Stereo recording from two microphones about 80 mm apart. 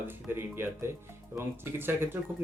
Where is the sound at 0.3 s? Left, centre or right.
Right.